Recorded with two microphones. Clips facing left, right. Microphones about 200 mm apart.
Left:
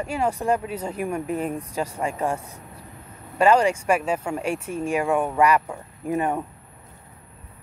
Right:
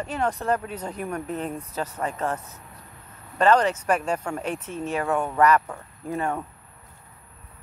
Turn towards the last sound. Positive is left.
turn(degrees=15)  # may be behind; listen again after turning